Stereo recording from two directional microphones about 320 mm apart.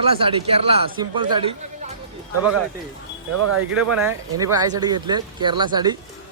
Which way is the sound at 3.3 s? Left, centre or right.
Right.